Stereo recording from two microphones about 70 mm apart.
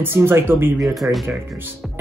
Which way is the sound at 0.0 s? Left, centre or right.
Right.